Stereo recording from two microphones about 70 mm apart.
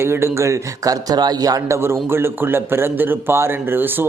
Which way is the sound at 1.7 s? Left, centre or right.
Right.